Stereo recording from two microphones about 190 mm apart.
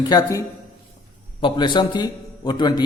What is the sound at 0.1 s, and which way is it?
A man's voice, 20° left (ahead or behind).